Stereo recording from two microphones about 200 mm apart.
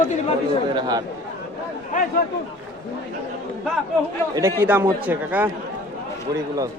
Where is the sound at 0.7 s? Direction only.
20° right (ahead or behind).